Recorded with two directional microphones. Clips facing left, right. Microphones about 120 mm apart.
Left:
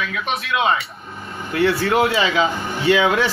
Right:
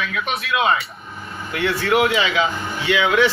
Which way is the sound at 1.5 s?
35° left (ahead or behind).